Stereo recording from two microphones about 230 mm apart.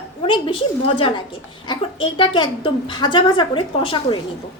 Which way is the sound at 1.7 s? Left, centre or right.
Left.